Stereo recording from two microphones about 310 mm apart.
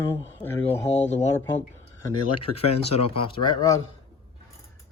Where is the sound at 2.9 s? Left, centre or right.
Centre.